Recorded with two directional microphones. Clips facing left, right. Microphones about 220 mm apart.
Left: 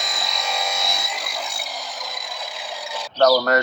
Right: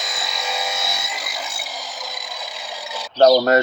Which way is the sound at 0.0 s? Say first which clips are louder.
Even; centre (ahead or behind).